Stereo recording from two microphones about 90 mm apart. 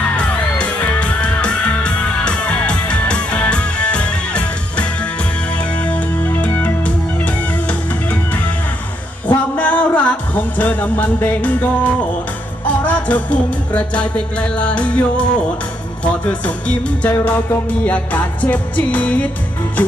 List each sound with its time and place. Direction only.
0.1 s music: 15° left (ahead or behind)